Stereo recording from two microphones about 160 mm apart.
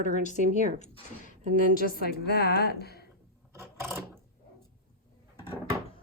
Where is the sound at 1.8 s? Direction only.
70° left (ahead or behind).